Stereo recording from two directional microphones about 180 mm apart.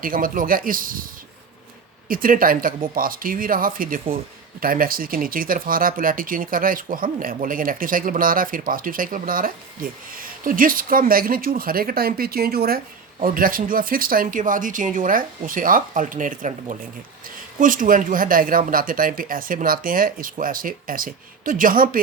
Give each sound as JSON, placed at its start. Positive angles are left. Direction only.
{"t": 0.0, "sound": "speech", "side_deg": -50}
{"t": 2.0, "sound": "speech", "side_deg": -50}